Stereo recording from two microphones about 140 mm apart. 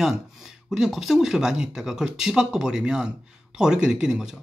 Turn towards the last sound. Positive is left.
turn(degrees=-5)  # may be behind; listen again after turning